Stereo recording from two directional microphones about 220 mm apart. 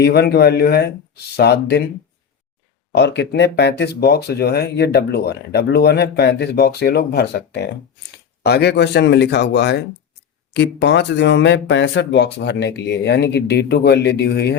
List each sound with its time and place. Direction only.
0.0 s speech: 45° left (ahead or behind)
2.9 s speech: 50° left (ahead or behind)